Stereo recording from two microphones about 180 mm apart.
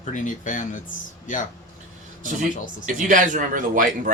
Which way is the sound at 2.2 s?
45° right (ahead or behind).